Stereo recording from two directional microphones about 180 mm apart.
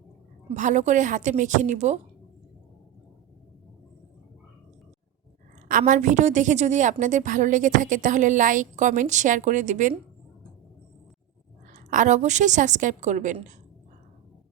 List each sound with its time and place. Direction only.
0.4 s a woman's voice: 40° right (ahead or behind)
5.6 s a woman's voice: 45° right (ahead or behind)
11.7 s a woman's voice: 45° right (ahead or behind)